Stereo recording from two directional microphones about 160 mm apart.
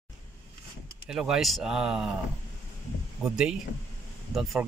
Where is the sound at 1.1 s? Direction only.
5° right (ahead or behind).